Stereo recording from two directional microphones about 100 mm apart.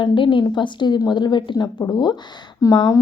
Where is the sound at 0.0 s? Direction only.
55° left (ahead or behind).